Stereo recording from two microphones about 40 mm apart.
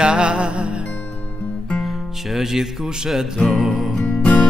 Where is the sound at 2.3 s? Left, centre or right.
Centre.